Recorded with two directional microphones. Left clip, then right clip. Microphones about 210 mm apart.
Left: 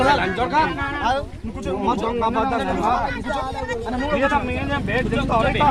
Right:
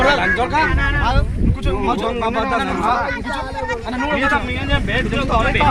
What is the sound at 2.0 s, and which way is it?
Speech, 15° right (ahead or behind).